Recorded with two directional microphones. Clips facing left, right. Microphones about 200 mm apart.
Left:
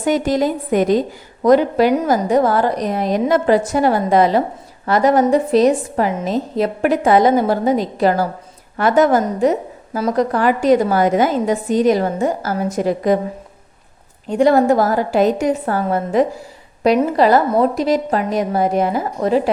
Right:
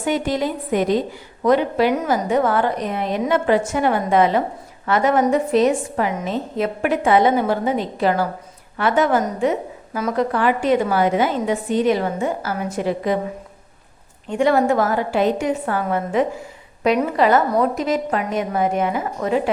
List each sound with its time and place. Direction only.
0.0 s a woman's voice: 40° left (ahead or behind)
14.3 s a woman's voice: 35° left (ahead or behind)